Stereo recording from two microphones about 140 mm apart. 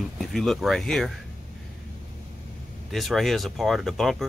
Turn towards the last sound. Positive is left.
turn(degrees=0)  # may be behind; listen again after turning